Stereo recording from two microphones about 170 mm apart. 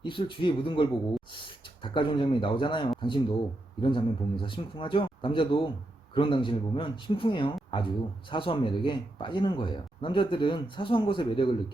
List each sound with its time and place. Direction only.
0.0 s speech: 30° left (ahead or behind)